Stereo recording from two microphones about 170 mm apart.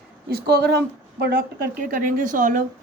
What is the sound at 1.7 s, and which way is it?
Speech, 50° right (ahead or behind).